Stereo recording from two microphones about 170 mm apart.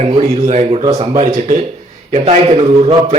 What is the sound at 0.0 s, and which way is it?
A man's voice, 40° right (ahead or behind).